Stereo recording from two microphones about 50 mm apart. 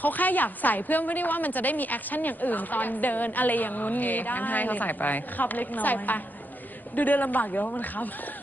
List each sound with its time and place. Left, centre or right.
0.0 s a woman's voice: left